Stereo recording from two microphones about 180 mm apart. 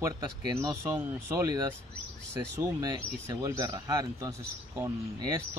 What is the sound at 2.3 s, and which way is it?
Speech, 20° right (ahead or behind).